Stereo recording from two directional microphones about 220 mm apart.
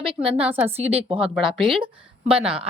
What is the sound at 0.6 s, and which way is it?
Speech, 30° right (ahead or behind).